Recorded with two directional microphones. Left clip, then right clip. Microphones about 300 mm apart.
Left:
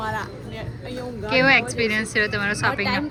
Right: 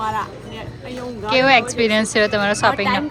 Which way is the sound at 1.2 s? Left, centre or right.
Centre.